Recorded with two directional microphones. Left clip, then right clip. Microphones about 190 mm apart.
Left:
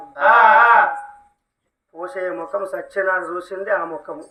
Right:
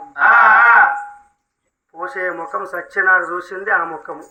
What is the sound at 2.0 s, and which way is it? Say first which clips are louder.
Speech: right 3 dB; 40° left (ahead or behind).